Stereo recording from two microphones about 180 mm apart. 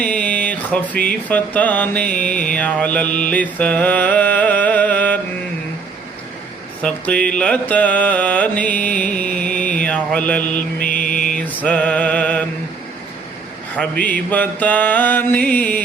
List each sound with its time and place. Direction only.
0.0 s a sound: 5° left (ahead or behind)
2.2 s mantra: 5° left (ahead or behind)
6.8 s mantra: 5° left (ahead or behind)
9.1 s music: 5° left (ahead or behind)
9.8 s mantra: 5° left (ahead or behind)
10.8 s mantra: 50° left (ahead or behind)
11.3 s mantra: 5° left (ahead or behind)
13.7 s mantra: 5° left (ahead or behind)